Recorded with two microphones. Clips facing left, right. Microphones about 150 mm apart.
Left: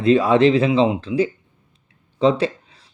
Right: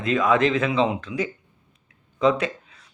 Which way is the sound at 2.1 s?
30° left (ahead or behind).